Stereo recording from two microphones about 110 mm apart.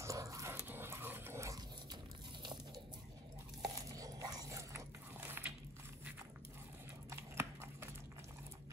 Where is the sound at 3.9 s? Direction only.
30° right (ahead or behind).